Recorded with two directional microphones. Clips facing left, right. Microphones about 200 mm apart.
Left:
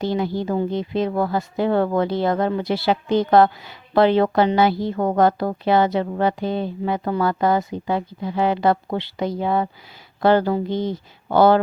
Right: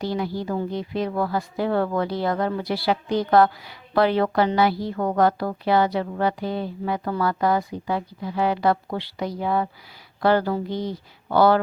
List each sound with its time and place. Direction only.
0.0 s a woman's voice: 25° left (ahead or behind)